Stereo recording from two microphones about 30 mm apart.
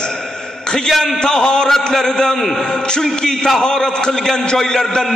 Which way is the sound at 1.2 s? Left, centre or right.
Left.